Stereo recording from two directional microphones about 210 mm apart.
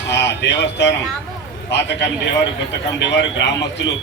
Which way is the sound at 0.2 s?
55° left (ahead or behind).